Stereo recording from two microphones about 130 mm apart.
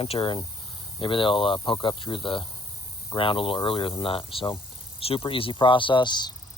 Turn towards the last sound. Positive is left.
turn(degrees=35)  # may be behind; listen again after turning